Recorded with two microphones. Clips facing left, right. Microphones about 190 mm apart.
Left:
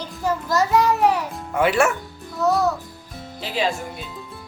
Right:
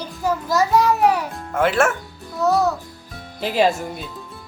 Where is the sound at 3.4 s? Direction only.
45° right (ahead or behind).